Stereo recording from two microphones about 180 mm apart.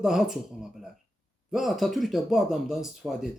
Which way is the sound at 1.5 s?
Centre (ahead or behind).